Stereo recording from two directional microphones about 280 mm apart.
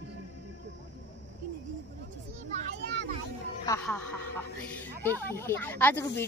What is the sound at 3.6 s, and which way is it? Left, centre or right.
Speech, centre.